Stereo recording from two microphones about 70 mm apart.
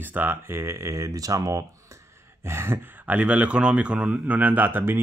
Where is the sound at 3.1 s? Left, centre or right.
Centre.